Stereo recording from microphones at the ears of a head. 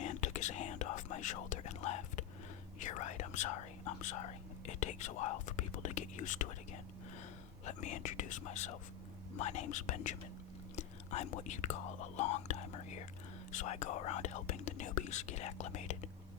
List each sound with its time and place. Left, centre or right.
0.0 s whispering: left
7.6 s speech: left